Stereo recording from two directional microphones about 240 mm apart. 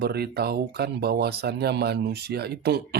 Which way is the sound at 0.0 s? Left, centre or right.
Right.